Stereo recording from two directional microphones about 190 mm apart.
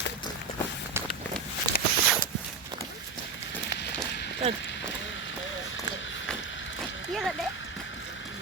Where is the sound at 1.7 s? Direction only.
55° left (ahead or behind).